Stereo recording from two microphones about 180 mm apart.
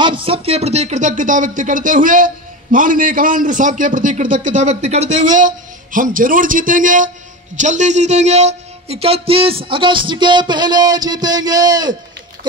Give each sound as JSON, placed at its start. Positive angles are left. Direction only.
{"t": 0.0, "sound": "speech", "side_deg": -30}